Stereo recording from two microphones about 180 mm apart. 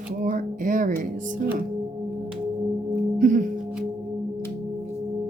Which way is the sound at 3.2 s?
45° right (ahead or behind).